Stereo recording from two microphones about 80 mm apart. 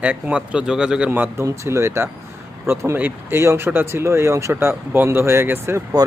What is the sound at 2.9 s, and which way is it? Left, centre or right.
Speech, right.